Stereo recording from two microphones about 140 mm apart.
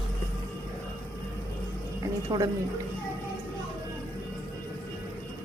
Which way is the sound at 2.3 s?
30° right (ahead or behind).